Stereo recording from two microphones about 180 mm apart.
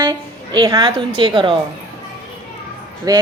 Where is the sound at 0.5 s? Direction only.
25° right (ahead or behind).